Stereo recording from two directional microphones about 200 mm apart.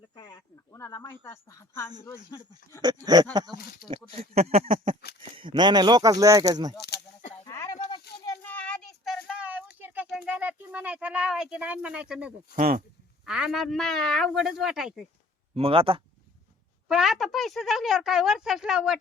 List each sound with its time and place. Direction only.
0.2 s a woman's voice: 20° left (ahead or behind)
2.8 s speech: 20° right (ahead or behind)
3.8 s speech: 30° right (ahead or behind)
6.7 s a sound: 55° left (ahead or behind)
7.4 s a sound: 15° left (ahead or behind)
8.2 s a sound: 15° left (ahead or behind); by 12.3 s 5° right (ahead or behind)
12.5 s speech: 45° right (ahead or behind)
13.2 s speech: 5° right (ahead or behind)
15.5 s speech: 30° right (ahead or behind)
16.9 s speech: centre (ahead or behind)